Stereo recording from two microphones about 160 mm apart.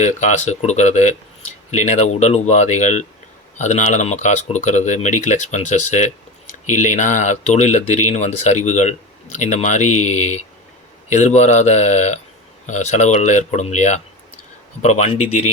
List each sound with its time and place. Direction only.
0.0 s speech: 45° left (ahead or behind)